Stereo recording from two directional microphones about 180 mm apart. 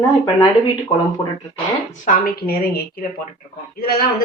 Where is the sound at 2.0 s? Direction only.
50° left (ahead or behind).